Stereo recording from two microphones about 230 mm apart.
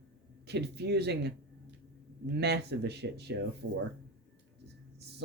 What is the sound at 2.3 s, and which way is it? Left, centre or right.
Speech, right.